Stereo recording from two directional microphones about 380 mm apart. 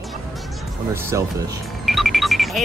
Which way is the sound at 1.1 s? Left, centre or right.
Centre.